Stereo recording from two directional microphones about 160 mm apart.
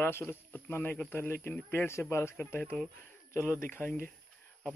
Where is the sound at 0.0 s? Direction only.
15° left (ahead or behind).